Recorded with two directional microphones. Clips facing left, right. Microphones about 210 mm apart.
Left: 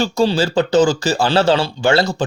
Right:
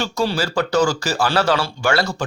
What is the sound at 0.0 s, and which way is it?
Speech, 25° left (ahead or behind).